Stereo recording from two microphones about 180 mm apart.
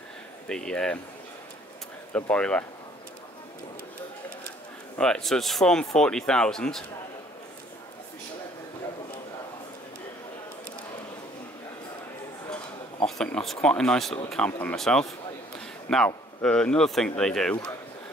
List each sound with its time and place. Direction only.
0.5 s speech: 5° left (ahead or behind)
2.1 s speech: 5° left (ahead or behind)
4.9 s speech: 5° left (ahead or behind)
13.0 s speech: 5° left (ahead or behind)